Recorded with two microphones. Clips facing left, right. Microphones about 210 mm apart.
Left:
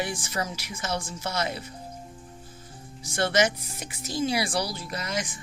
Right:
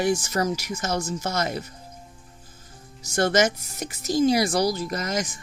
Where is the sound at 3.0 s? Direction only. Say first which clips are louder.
Right 3 dB; 45° right (ahead or behind).